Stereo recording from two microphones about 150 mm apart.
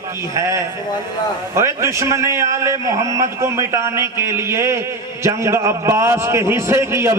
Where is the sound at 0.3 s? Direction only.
20° right (ahead or behind).